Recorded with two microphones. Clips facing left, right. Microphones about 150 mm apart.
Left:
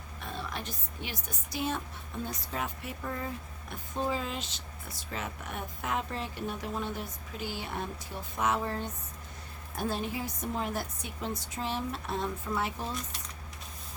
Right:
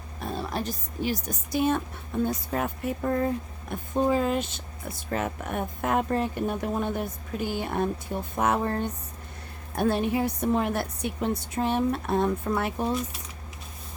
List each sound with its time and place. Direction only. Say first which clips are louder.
0.2 s a woman's voice: right 8 dB; 40° right (ahead or behind); by 13.0 s 60° right (ahead or behind)